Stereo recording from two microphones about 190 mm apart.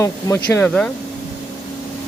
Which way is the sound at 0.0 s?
15° left (ahead or behind).